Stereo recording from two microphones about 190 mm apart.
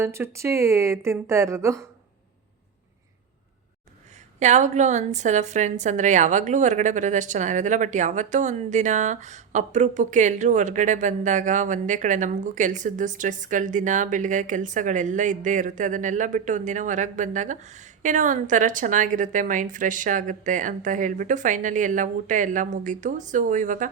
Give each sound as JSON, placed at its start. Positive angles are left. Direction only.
{"t": 0.0, "sound": "speech", "side_deg": -15}
{"t": 4.4, "sound": "a woman's voice", "side_deg": -40}